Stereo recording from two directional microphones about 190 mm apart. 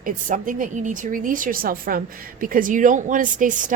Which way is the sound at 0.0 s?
45° right (ahead or behind).